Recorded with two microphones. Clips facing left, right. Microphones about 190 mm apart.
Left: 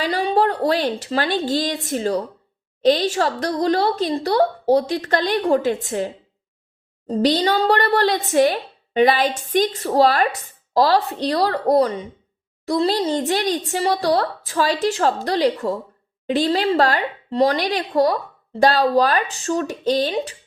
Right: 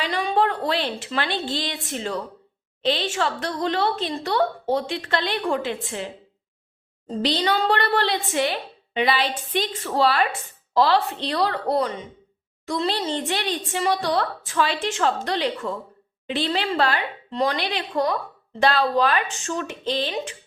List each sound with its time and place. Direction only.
0.0 s a woman's voice: 35° left (ahead or behind)
7.1 s speech: 40° left (ahead or behind)